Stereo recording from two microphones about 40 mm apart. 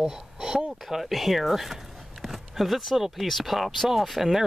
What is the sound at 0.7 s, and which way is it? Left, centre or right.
Speech, centre.